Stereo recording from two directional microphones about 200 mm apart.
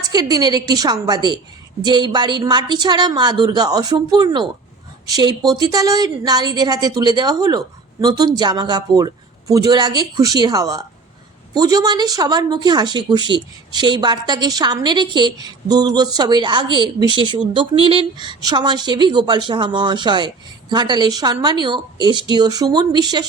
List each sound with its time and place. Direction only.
0.1 s speech: 20° right (ahead or behind)